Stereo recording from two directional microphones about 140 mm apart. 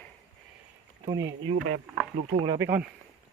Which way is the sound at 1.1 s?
25° right (ahead or behind).